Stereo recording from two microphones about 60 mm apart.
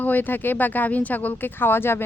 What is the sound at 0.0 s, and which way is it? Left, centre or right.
Speech, left.